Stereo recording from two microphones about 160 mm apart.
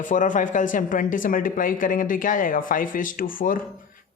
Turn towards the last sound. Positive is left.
turn(degrees=60)  # may be behind; listen again after turning